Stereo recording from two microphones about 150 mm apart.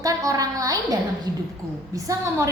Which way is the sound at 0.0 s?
25° right (ahead or behind).